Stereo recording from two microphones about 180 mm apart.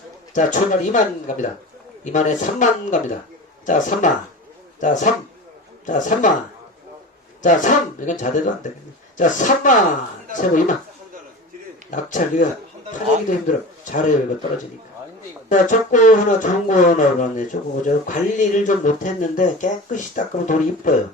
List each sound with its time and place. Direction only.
0.3 s speech: 45° left (ahead or behind)
7.4 s speech: 45° left (ahead or behind)
11.9 s a man's voice: 45° left (ahead or behind)
15.4 s speech: 45° left (ahead or behind)